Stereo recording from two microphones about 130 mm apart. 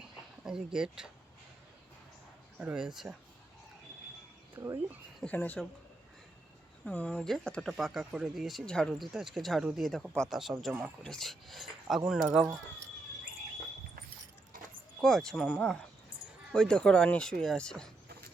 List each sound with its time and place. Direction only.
0.4 s speech: 5° right (ahead or behind)
2.6 s speech: 5° right (ahead or behind)
4.5 s speech: 15° right (ahead or behind)
5.2 s speech: 10° left (ahead or behind)
6.8 s speech: 10° left (ahead or behind)
15.0 s speech: 5° left (ahead or behind)